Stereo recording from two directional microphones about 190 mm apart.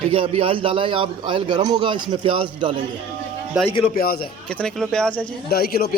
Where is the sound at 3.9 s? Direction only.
50° left (ahead or behind).